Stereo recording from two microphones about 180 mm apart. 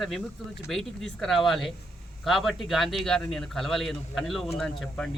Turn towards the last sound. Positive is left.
turn(degrees=0)  # may be behind; listen again after turning